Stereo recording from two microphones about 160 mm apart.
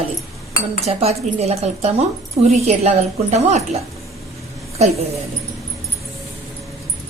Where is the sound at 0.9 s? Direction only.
40° right (ahead or behind).